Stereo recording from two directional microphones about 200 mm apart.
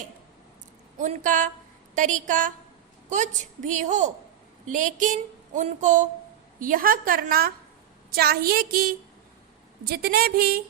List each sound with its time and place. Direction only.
0.9 s a woman's voice: 40° right (ahead or behind)